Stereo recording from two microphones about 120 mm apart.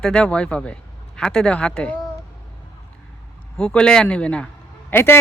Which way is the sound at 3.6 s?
5° left (ahead or behind).